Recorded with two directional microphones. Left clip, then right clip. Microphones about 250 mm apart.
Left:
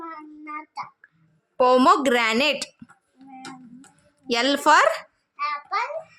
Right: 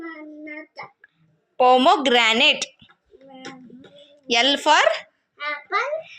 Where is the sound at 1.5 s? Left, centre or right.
Centre.